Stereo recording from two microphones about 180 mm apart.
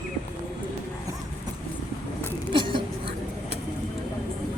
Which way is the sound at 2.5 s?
25° right (ahead or behind).